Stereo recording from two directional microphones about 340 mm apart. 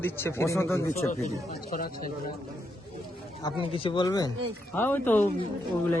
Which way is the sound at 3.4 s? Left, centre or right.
Centre.